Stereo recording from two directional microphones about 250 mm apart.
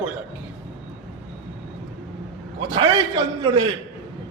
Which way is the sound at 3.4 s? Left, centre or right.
Centre.